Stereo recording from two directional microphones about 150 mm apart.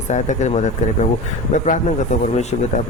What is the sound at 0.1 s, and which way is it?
Speech, 50° left (ahead or behind).